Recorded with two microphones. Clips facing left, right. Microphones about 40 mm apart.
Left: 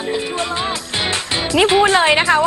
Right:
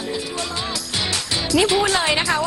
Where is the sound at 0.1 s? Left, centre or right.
Left.